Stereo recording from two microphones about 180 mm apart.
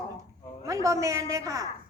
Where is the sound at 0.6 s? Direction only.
15° right (ahead or behind).